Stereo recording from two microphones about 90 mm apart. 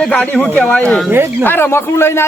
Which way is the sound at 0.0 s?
15° left (ahead or behind).